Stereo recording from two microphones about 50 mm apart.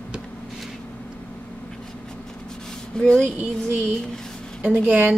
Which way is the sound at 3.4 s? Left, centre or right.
Right.